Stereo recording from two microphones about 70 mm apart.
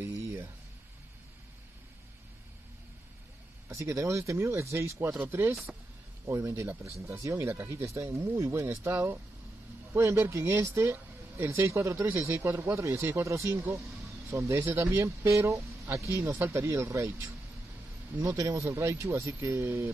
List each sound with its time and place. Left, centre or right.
0.0 s a sound: right
3.7 s speech: right
5.2 s speech: right
6.2 s speech: right
7.3 s speech: right
9.9 s speech: right
16.3 s speech: right
16.5 s speech: right